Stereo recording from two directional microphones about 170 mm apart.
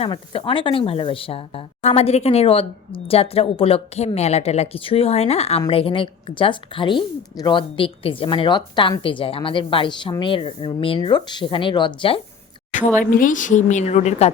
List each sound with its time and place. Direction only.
0.0 s speech: 30° left (ahead or behind)
13.0 s a woman's voice: 50° left (ahead or behind)